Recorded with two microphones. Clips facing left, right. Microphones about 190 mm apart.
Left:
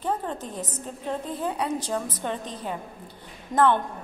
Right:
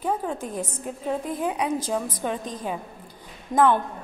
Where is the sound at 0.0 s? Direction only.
10° right (ahead or behind).